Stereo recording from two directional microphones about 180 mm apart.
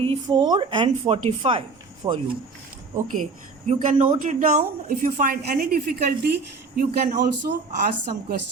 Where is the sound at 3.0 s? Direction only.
45° right (ahead or behind).